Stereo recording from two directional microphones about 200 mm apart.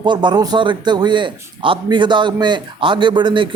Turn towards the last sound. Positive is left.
turn(degrees=-25)  # may be behind; listen again after turning